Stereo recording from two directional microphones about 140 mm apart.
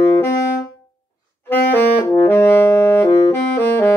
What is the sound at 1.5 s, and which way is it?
Saxophone, 15° left (ahead or behind).